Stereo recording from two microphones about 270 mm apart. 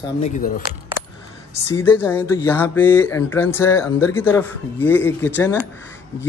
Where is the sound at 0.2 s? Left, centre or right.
Left.